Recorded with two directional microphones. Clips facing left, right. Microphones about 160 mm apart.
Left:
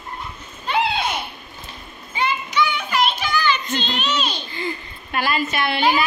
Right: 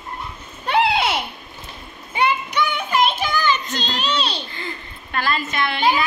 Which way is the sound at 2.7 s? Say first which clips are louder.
Right 2 dB; 50° right (ahead or behind).